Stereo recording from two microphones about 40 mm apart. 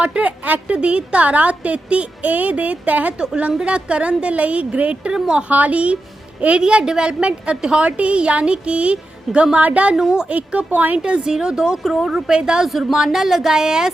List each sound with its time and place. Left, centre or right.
0.0 s a woman's voice: right
3.2 s a woman's voice: right
6.6 s speech: right
7.9 s a woman's voice: right
10.1 s speech: right
10.3 s a woman's voice: right
10.7 s speech: right
10.9 s speech: right; by 12.2 s centre
12.3 s speech: right